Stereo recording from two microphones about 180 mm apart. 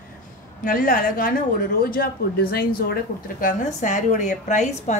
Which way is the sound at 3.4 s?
45° left (ahead or behind).